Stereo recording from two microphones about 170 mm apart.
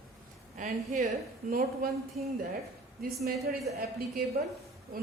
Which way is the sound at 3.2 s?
60° right (ahead or behind).